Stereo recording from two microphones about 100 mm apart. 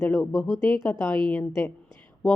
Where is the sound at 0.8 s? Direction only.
25° left (ahead or behind).